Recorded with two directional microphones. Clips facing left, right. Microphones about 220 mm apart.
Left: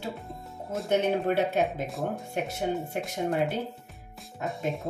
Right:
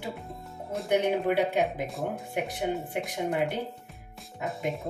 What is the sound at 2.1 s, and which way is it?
Speech, 15° right (ahead or behind).